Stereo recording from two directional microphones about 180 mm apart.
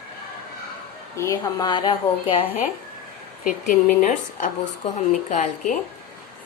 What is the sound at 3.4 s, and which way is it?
A woman's voice, 45° left (ahead or behind).